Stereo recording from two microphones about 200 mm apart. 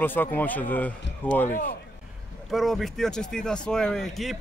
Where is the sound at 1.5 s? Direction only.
40° left (ahead or behind).